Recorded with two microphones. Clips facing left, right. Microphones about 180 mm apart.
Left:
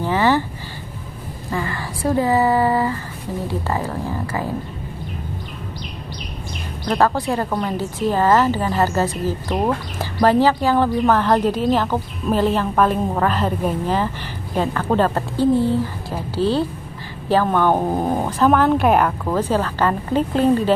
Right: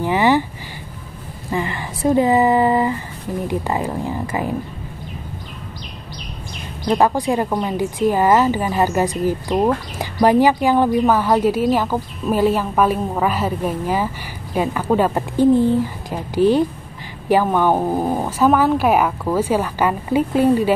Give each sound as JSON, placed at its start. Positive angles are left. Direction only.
{"t": 0.0, "sound": "speech", "side_deg": -15}
{"t": 1.5, "sound": "speech", "side_deg": -20}
{"t": 6.9, "sound": "speech", "side_deg": -15}